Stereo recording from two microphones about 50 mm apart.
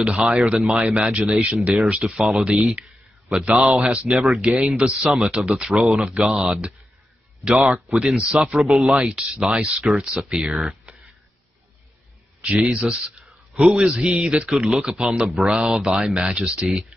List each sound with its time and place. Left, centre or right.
0.1 s speech: centre
2.6 s speech: centre
3.8 s speech: right
5.5 s speech: centre
7.6 s speech: centre
8.0 s speech: centre
8.9 s speech: centre
12.4 s speech: centre
12.7 s speech: centre
15.2 s speech: centre